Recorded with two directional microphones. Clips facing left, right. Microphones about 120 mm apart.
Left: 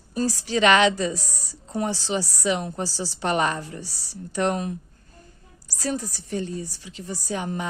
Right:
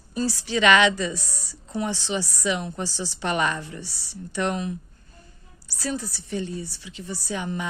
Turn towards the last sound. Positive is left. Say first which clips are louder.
# left 1 dB
turn(degrees=40)  # may be behind; listen again after turning